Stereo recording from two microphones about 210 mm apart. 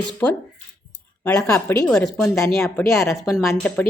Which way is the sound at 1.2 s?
10° left (ahead or behind).